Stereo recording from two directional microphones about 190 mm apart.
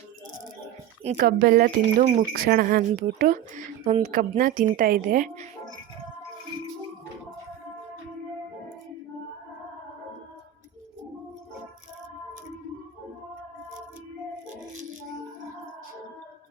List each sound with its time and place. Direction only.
1.1 s speech: 50° right (ahead or behind)